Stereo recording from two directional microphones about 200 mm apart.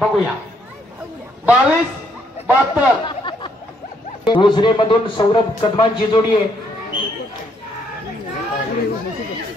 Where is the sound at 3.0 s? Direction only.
25° left (ahead or behind).